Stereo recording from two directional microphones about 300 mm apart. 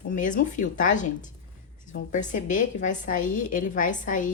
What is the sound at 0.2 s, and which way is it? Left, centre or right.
A woman's voice, left.